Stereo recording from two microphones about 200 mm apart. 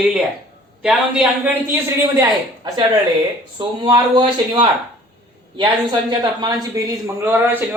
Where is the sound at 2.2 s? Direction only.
20° right (ahead or behind).